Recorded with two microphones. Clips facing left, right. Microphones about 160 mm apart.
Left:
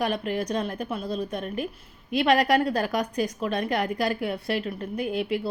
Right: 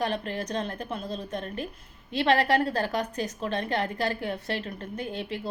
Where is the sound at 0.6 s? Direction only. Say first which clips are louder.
Left 3 dB; 10° left (ahead or behind).